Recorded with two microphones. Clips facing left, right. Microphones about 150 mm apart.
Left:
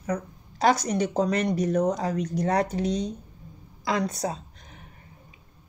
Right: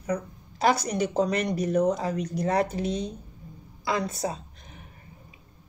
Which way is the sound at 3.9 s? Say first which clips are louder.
Left 2 dB; 25° right (ahead or behind).